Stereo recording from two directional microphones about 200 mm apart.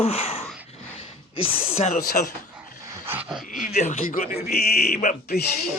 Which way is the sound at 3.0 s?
10° right (ahead or behind).